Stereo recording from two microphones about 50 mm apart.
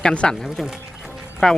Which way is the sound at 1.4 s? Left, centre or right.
Centre.